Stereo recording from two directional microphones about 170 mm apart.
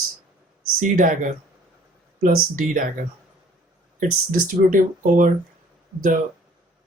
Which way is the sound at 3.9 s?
55° right (ahead or behind).